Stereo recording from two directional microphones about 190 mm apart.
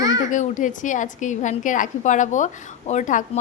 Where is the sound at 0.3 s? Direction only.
40° left (ahead or behind).